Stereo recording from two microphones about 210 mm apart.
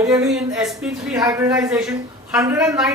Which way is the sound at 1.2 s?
15° right (ahead or behind).